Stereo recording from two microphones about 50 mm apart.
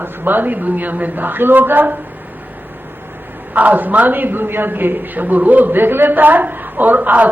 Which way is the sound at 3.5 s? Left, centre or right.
Right.